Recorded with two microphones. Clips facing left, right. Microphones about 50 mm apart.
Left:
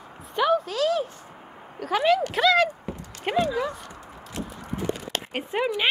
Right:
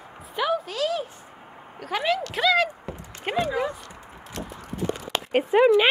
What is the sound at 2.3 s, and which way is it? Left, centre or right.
Clip-clop, centre.